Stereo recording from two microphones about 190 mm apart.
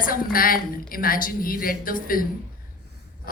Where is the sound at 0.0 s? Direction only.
50° left (ahead or behind).